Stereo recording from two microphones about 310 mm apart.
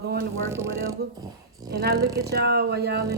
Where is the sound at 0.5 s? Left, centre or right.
Centre.